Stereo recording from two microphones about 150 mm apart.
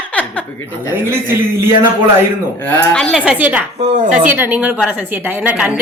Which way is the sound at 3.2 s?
10° right (ahead or behind).